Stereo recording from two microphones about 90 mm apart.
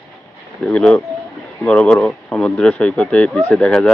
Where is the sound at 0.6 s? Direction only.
10° left (ahead or behind).